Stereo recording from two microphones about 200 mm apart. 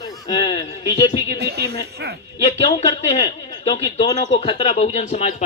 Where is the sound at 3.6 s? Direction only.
30° left (ahead or behind).